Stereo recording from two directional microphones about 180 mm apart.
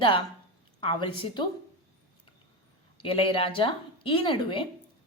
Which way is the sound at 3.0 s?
30° left (ahead or behind).